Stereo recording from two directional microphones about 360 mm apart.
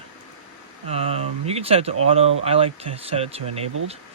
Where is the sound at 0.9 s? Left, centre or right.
Centre.